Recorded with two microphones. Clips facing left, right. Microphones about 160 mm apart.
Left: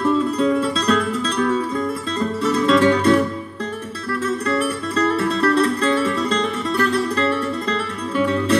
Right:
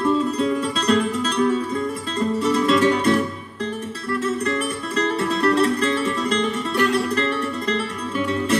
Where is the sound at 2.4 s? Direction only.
25° right (ahead or behind).